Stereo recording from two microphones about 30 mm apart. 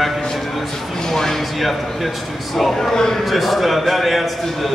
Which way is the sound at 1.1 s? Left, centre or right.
Centre.